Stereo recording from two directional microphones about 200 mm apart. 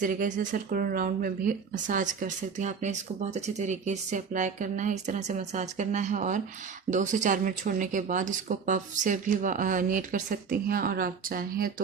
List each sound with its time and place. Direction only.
0.0 s speech: 40° right (ahead or behind)